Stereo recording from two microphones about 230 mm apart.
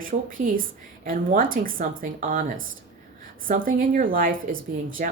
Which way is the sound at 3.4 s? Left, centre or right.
Right.